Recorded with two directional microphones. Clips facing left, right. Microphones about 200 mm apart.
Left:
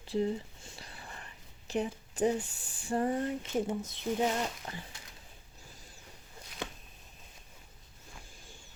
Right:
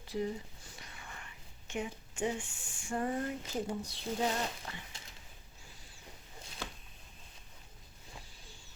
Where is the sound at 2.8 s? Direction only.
30° left (ahead or behind).